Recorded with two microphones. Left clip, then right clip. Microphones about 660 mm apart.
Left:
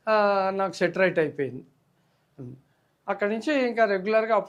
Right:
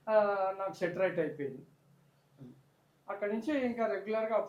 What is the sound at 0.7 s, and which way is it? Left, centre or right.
Speech, left.